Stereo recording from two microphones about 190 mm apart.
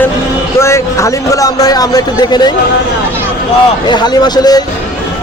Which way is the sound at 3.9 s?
20° left (ahead or behind).